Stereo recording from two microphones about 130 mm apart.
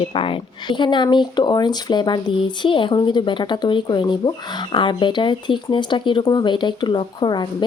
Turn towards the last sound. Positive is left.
turn(degrees=35)  # may be behind; listen again after turning